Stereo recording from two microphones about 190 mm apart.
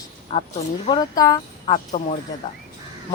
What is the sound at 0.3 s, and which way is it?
Speech, 30° left (ahead or behind).